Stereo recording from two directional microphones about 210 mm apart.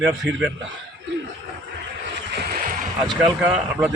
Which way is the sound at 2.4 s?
40° right (ahead or behind).